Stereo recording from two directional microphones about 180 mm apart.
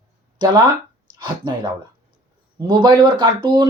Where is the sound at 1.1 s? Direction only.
25° right (ahead or behind).